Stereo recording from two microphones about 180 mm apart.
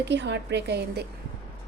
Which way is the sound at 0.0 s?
75° right (ahead or behind).